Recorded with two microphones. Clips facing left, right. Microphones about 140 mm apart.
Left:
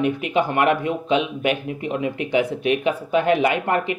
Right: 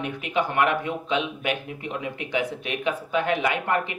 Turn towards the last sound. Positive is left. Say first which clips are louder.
# left 4 dB
turn(degrees=20)  # may be behind; listen again after turning